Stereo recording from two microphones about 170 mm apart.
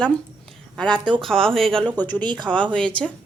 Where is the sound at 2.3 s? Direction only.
25° right (ahead or behind).